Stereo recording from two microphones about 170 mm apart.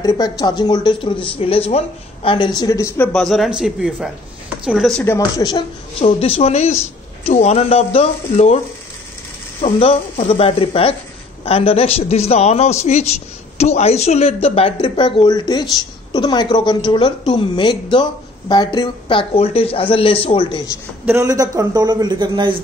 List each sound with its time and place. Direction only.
0.0 s a woman's voice: 25° left (ahead or behind)
3.1 s speech: 5° left (ahead or behind)
5.0 s a woman's voice: 20° left (ahead or behind)
5.9 s a man's voice: 35° left (ahead or behind)
9.6 s a man's voice: 35° left (ahead or behind)
21.0 s speech: 15° right (ahead or behind)